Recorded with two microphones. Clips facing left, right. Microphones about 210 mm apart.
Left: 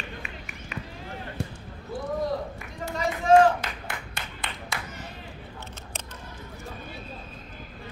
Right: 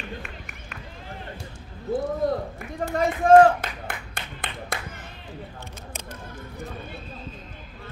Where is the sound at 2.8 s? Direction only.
55° right (ahead or behind).